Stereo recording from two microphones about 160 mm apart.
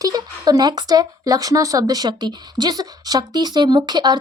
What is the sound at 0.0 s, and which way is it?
Speech, 25° right (ahead or behind).